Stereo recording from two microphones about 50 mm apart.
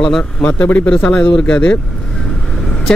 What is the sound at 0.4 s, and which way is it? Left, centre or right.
Speech, left.